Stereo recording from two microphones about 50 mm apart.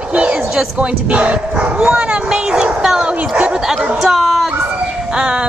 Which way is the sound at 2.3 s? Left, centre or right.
Centre.